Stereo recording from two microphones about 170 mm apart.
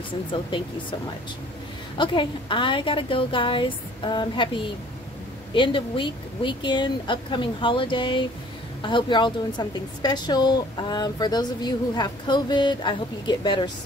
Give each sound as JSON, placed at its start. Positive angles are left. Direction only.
{"t": 2.0, "sound": "a woman's voice", "side_deg": 30}